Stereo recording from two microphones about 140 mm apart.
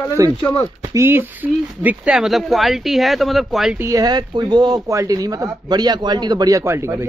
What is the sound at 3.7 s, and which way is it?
Speech, 20° right (ahead or behind).